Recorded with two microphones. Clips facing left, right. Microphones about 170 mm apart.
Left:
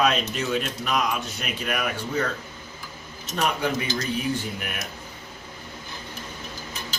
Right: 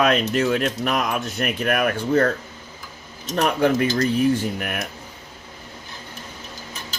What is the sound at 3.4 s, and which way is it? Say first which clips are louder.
Speech: right 7 dB; 55° right (ahead or behind).